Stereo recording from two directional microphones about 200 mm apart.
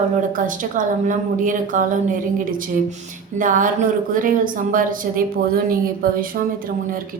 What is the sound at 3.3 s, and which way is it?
A woman's voice, 40° right (ahead or behind).